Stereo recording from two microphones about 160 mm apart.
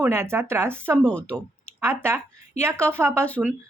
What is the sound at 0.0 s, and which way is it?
Speech, 15° right (ahead or behind).